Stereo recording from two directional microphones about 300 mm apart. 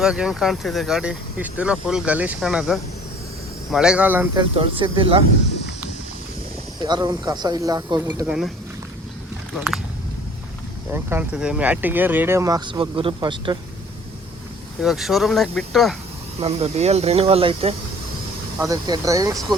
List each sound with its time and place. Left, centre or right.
0.0 s speech: centre
4.5 s speech: centre
6.8 s speech: centre
10.9 s speech: centre
14.8 s speech: centre
16.4 s speech: right